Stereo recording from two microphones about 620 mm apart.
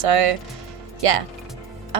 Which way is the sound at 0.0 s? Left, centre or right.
Right.